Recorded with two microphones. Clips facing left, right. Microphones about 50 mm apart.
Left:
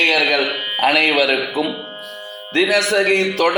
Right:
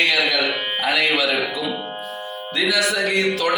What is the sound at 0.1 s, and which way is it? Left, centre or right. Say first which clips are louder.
Music: left 3 dB; left.